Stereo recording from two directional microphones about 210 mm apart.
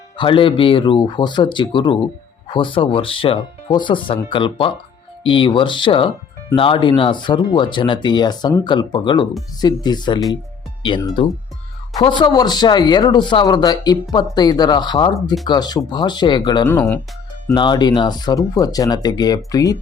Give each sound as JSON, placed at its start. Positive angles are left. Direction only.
{"t": 0.2, "sound": "speech", "side_deg": 25}
{"t": 17.5, "sound": "speech", "side_deg": 20}